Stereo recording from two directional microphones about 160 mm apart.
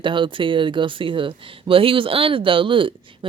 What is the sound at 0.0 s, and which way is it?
Speech, 30° right (ahead or behind).